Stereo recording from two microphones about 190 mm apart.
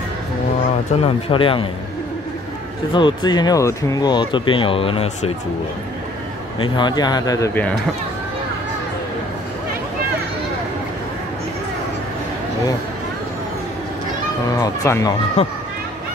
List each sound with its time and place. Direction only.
1.0 s speech: 30° left (ahead or behind)
2.9 s speech: 25° left (ahead or behind)
6.6 s speech: 25° left (ahead or behind)
14.5 s a sound: 15° left (ahead or behind)